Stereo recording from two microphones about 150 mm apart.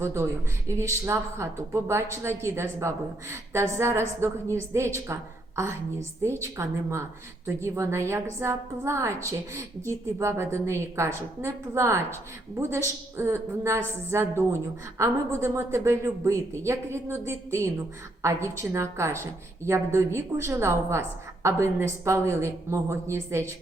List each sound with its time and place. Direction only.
0.0 s a woman's voice: 20° right (ahead or behind)